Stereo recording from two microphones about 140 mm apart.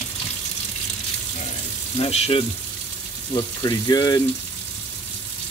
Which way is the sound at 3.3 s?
30° left (ahead or behind).